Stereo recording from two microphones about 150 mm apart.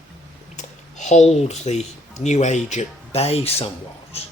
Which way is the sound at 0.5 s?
50° left (ahead or behind).